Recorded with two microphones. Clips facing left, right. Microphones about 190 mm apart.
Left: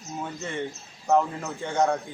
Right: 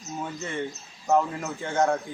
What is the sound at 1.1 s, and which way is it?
Speech, centre (ahead or behind).